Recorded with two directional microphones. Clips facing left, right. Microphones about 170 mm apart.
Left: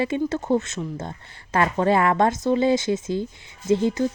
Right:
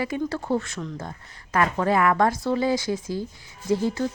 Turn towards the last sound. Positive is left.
turn(degrees=20)  # may be behind; listen again after turning